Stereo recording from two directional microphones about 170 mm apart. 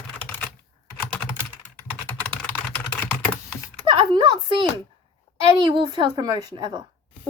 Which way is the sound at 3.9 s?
30° right (ahead or behind).